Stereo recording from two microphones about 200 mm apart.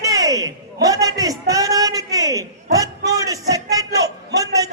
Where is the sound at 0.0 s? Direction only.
15° right (ahead or behind).